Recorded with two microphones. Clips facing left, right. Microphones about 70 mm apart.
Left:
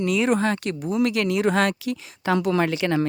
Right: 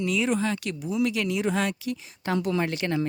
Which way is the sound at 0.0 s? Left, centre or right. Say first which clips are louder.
Left 4 dB; left.